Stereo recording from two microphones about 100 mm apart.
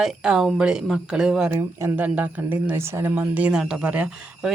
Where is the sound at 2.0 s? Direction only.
15° right (ahead or behind).